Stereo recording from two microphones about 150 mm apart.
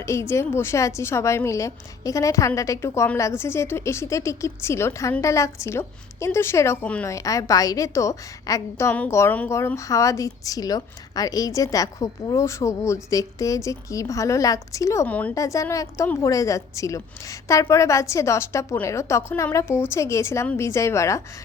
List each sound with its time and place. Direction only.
0.0 s a woman's voice: 20° left (ahead or behind)
15.0 s a woman's voice: 10° left (ahead or behind)
15.4 s a woman's voice: 20° left (ahead or behind)